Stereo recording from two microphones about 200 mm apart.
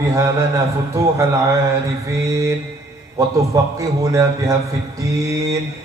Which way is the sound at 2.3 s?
15° right (ahead or behind).